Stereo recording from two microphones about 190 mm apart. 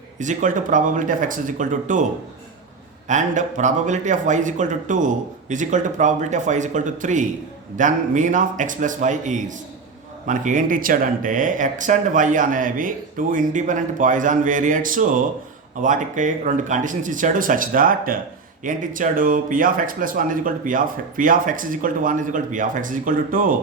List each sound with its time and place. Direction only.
0.2 s speech: 40° right (ahead or behind)
3.1 s speech: 40° right (ahead or behind)